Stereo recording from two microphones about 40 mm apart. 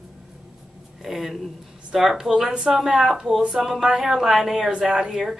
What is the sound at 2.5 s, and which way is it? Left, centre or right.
A woman's voice, right.